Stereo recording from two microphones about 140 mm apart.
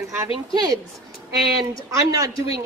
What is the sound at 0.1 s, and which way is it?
A woman's voice, 15° right (ahead or behind).